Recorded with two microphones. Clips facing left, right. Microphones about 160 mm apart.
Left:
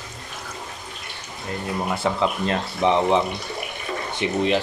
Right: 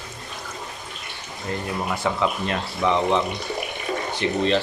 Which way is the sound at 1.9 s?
30° left (ahead or behind).